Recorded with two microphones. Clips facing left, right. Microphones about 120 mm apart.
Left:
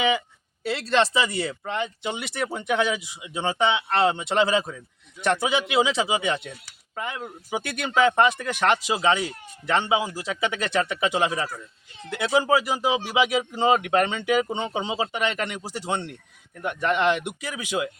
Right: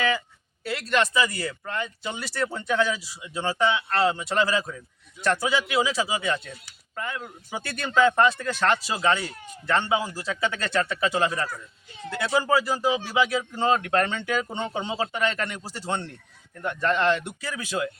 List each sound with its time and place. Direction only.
0.6 s speech: 25° left (ahead or behind)